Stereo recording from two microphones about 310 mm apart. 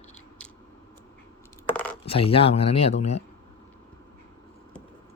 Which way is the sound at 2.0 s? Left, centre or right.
Centre.